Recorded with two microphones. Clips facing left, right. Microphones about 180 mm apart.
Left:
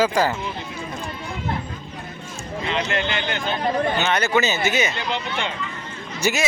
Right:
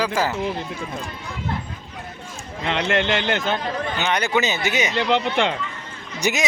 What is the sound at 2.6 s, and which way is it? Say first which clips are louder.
Speech: right 3 dB; 75° right (ahead or behind).